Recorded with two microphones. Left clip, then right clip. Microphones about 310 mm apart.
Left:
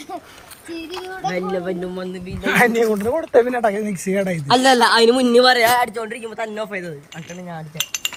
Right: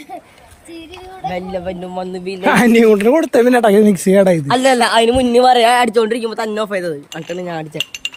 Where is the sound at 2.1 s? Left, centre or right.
Right.